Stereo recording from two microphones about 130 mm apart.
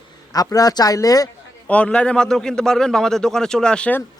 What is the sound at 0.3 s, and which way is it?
Speech, 30° left (ahead or behind).